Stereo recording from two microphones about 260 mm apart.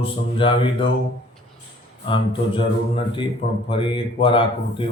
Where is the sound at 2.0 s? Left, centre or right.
Centre.